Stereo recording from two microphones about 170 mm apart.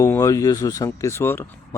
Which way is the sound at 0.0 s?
20° left (ahead or behind).